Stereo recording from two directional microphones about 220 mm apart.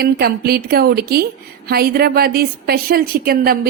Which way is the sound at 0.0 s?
45° right (ahead or behind).